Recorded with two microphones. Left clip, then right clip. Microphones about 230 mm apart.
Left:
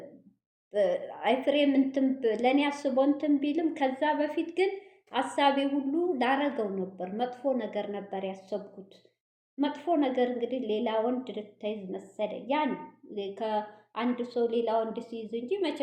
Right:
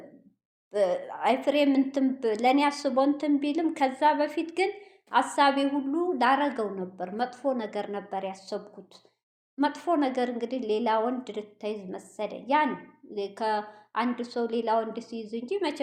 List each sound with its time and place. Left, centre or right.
0.7 s a woman's voice: centre
9.6 s a woman's voice: right